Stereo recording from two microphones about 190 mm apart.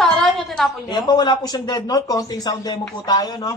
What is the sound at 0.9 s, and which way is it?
Speech, 20° left (ahead or behind).